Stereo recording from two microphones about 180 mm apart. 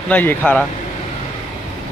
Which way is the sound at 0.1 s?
10° left (ahead or behind).